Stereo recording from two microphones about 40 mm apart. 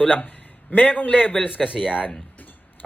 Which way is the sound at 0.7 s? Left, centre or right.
Left.